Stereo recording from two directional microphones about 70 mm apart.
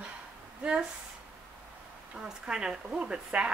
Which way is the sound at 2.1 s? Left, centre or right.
Centre.